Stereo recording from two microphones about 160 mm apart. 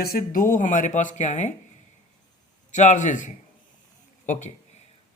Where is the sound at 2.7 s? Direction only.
50° left (ahead or behind).